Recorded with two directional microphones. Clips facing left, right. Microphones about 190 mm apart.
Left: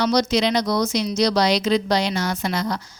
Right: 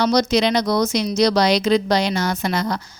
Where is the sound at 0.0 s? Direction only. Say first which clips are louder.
Right 2 dB; 50° right (ahead or behind).